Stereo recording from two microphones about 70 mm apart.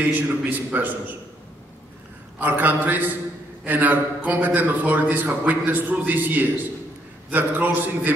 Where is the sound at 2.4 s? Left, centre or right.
Right.